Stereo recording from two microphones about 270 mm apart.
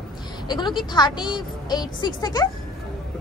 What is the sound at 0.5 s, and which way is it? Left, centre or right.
Speech, centre.